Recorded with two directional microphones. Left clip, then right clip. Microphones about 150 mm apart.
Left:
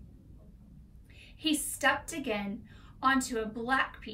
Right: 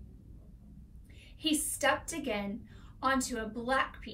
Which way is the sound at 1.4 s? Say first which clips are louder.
Left 1 dB; 5° left (ahead or behind).